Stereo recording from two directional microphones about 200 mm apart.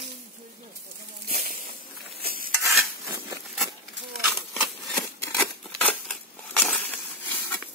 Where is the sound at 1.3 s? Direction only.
45° right (ahead or behind).